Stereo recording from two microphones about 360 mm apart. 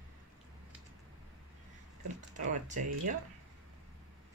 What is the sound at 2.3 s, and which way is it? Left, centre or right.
Speech, right.